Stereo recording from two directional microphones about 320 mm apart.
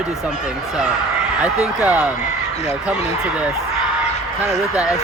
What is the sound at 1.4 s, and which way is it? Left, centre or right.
Speech, centre.